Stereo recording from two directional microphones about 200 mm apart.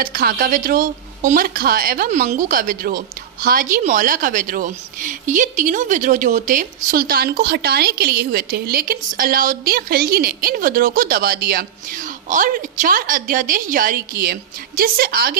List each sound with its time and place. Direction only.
0.0 s a woman's voice: 45° right (ahead or behind)